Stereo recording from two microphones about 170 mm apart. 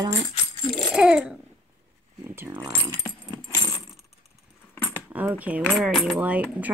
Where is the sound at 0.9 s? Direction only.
5° right (ahead or behind).